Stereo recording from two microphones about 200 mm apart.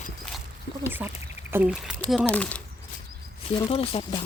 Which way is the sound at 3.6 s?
30° left (ahead or behind).